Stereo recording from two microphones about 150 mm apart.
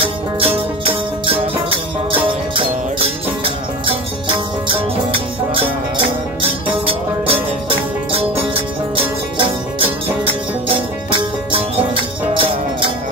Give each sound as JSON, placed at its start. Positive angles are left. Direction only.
{"t": 0.0, "sound": "music", "side_deg": -40}
{"t": 9.4, "sound": "music", "side_deg": -35}
{"t": 11.1, "sound": "music", "side_deg": -35}